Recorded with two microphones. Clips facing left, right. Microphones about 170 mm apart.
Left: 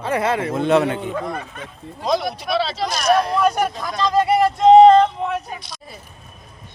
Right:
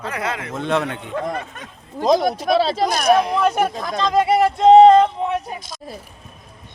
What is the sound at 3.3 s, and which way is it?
Speech, 25° right (ahead or behind).